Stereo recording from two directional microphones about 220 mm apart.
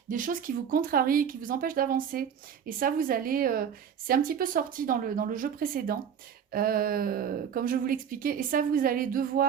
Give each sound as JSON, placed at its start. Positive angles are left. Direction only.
{"t": 0.1, "sound": "a woman's voice", "side_deg": -40}